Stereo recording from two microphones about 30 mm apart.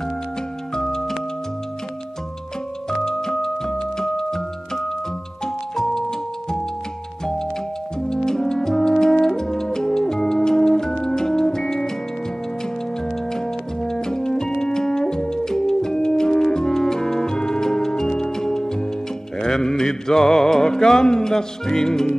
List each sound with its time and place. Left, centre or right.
2.9 s music: centre
8.0 s brass instrument: left
11.0 s music: left
13.3 s music: centre